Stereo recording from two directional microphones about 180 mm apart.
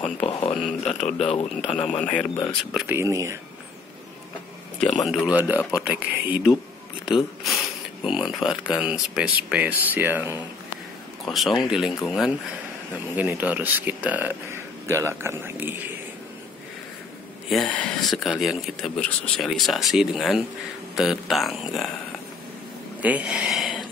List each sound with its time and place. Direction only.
0.0 s speech: 30° left (ahead or behind)
2.0 s speech: 5° left (ahead or behind)
3.0 s speech: 15° right (ahead or behind)
4.7 s speech: centre (ahead or behind)
11.2 s speech: centre (ahead or behind)
17.5 s speech: 5° left (ahead or behind)
23.0 s speech: 10° right (ahead or behind)